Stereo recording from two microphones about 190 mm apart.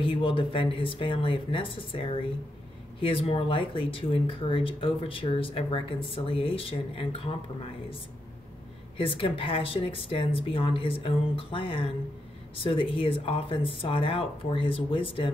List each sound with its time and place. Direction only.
0.0 s speech: 30° left (ahead or behind)
8.9 s speech: 25° left (ahead or behind)